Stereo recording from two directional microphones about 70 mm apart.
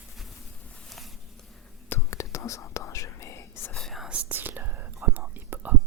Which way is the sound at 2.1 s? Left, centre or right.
Left.